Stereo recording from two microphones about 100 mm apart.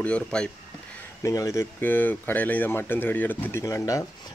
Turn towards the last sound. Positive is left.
turn(degrees=35)  # may be behind; listen again after turning